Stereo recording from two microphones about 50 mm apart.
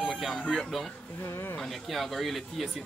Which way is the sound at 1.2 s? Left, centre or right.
Left.